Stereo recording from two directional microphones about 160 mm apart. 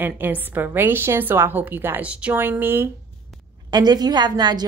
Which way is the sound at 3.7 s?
25° right (ahead or behind).